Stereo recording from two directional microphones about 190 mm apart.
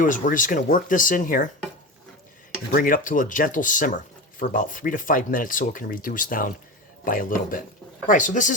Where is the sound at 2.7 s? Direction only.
45° left (ahead or behind).